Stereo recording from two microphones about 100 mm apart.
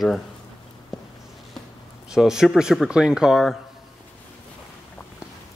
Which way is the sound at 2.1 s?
5° right (ahead or behind).